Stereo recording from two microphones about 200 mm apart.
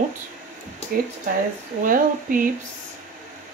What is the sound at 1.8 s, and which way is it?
Speech, 40° right (ahead or behind).